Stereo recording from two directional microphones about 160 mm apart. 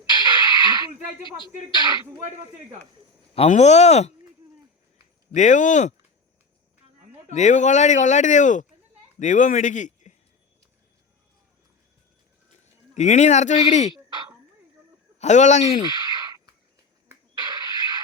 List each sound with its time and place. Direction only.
0.0 s a sound: 25° right (ahead or behind)
1.5 s speech: 25° right (ahead or behind)
3.3 s speech: 40° left (ahead or behind)
5.3 s speech: 50° left (ahead or behind)
7.3 s a man's voice: 50° left (ahead or behind)
12.9 s speech: 45° left (ahead or behind)
14.1 s throat clearing: 25° right (ahead or behind)
15.2 s speech: 45° left (ahead or behind)
15.8 s a sound: 30° right (ahead or behind)